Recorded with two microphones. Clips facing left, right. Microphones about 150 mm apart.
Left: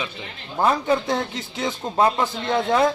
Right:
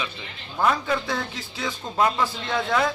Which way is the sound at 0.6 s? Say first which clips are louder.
Left 3 dB; 30° left (ahead or behind).